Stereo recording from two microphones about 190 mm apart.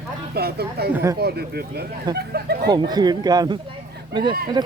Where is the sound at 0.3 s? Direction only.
55° right (ahead or behind).